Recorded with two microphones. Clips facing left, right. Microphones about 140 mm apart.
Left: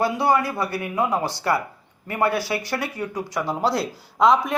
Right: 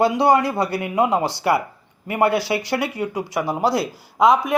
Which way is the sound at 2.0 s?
15° right (ahead or behind).